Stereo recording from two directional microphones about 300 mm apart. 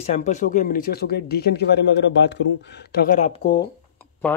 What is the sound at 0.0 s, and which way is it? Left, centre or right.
Speech, left.